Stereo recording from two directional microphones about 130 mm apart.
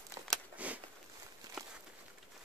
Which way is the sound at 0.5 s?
10° right (ahead or behind).